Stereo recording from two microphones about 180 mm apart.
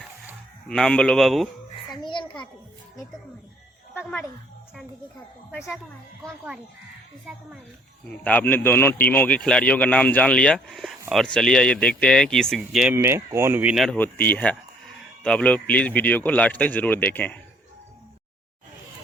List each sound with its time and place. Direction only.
0.7 s speech: 5° left (ahead or behind)
1.9 s a sound: 25° left (ahead or behind)
3.9 s speech: 5° left (ahead or behind)
8.0 s speech: 10° left (ahead or behind)